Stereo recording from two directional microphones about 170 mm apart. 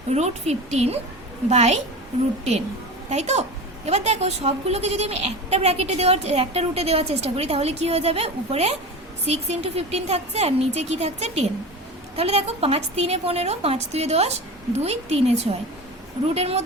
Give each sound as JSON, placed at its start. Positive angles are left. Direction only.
{"t": 0.1, "sound": "a woman's voice", "side_deg": -40}
{"t": 3.1, "sound": "a woman's voice", "side_deg": -40}